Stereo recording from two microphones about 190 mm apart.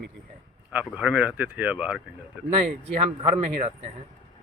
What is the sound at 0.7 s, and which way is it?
Speech, 5° right (ahead or behind).